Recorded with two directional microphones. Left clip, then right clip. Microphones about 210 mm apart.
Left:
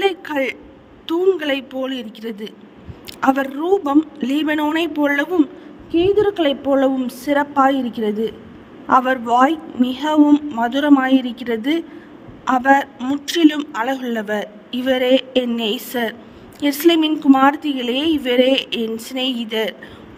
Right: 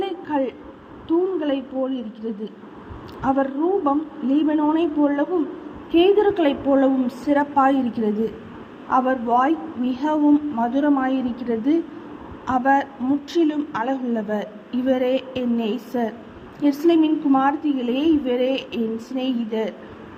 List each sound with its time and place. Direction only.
0.0 s a sound: 55° left (ahead or behind)
1.0 s a woman's voice: 55° left (ahead or behind)
5.9 s speech: 25° left (ahead or behind); by 19.7 s 55° left (ahead or behind)